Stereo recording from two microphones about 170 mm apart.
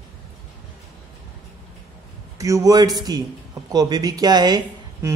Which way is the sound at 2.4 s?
20° right (ahead or behind).